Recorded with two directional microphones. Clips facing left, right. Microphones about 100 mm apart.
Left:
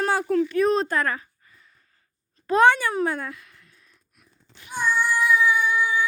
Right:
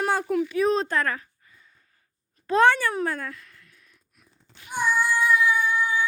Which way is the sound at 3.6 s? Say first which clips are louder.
Even; 30° left (ahead or behind).